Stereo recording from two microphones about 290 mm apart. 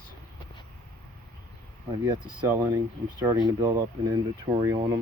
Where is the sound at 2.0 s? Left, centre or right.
Centre.